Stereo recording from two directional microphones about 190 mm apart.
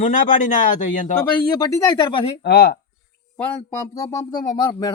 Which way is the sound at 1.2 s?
15° left (ahead or behind).